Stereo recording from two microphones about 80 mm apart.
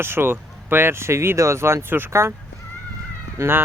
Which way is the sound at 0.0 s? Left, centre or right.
Right.